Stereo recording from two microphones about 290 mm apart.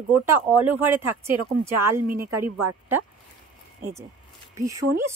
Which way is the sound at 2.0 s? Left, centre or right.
Right.